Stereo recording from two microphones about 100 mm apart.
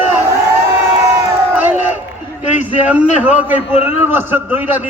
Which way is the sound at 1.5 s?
15° right (ahead or behind).